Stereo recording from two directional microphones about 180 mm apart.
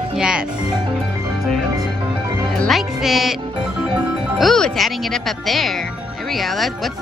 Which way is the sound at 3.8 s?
5° right (ahead or behind).